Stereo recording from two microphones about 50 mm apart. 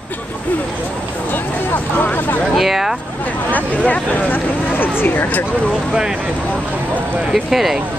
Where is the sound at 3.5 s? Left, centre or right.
Left.